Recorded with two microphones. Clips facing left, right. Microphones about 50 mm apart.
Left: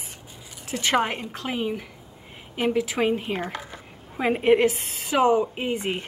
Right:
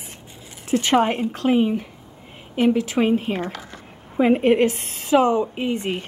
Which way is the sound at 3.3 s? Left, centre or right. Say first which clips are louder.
Right 2 dB; centre.